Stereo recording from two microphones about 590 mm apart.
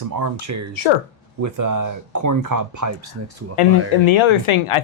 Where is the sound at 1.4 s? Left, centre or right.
Right.